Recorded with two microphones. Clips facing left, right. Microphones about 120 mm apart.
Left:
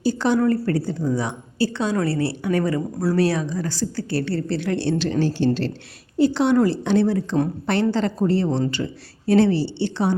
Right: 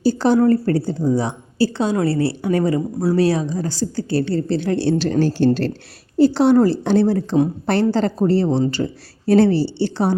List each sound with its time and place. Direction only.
0.0 s a woman's voice: 35° right (ahead or behind)